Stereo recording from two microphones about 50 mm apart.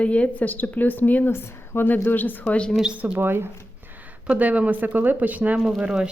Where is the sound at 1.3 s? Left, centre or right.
Left.